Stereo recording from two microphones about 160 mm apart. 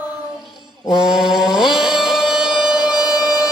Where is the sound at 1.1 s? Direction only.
Centre (ahead or behind).